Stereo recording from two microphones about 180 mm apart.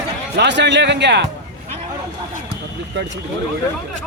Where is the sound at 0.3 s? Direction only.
75° right (ahead or behind).